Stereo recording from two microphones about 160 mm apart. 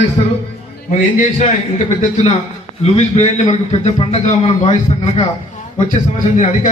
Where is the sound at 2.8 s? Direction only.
45° left (ahead or behind).